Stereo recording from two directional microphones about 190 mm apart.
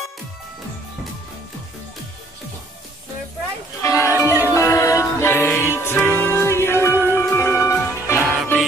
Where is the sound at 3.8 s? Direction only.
15° left (ahead or behind).